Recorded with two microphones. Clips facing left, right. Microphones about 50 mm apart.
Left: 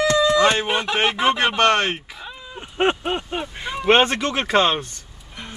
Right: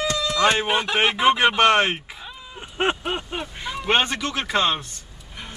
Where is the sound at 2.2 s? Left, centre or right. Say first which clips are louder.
Left 2 dB; centre; by 4.1 s left.